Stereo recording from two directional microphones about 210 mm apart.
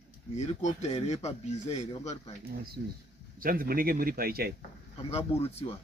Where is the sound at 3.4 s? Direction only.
45° right (ahead or behind).